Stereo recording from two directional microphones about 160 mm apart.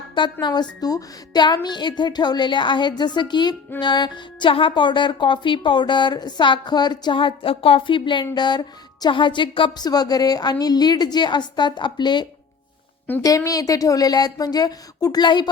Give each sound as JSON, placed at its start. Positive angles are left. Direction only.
{"t": 0.1, "sound": "speech", "side_deg": 30}